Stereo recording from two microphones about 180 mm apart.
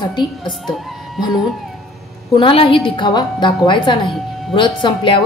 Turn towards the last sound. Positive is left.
turn(degrees=30)  # may be behind; listen again after turning